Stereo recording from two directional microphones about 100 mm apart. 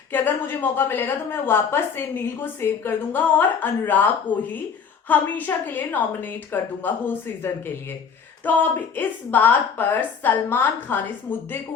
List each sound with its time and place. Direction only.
0.1 s a woman's voice: 20° left (ahead or behind)